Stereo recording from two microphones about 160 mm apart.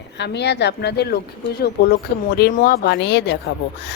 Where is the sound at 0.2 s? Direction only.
90° left.